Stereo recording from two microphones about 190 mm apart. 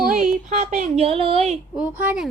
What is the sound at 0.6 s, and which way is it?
A woman's voice, 40° right (ahead or behind).